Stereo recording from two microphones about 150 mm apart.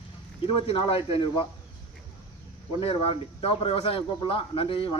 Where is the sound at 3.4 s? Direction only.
40° left (ahead or behind).